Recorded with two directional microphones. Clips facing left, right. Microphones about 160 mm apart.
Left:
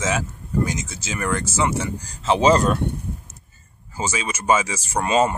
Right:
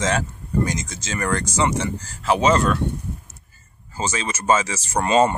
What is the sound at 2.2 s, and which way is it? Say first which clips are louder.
Speech: left 1 dB; 30° left (ahead or behind).